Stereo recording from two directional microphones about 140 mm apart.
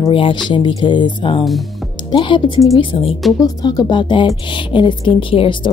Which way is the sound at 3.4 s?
30° left (ahead or behind).